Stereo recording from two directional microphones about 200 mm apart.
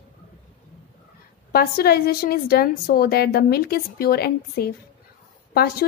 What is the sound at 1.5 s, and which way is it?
A woman's voice, 50° left (ahead or behind).